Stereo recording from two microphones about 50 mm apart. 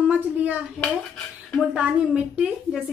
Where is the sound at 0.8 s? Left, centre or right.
Centre.